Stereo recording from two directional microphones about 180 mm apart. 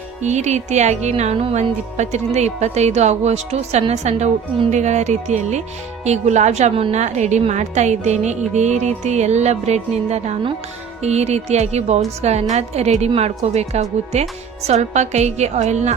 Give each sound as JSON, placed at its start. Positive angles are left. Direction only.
{"t": 0.2, "sound": "speech", "side_deg": -40}